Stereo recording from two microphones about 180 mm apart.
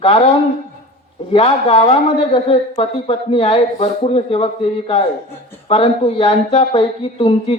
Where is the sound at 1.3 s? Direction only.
35° left (ahead or behind).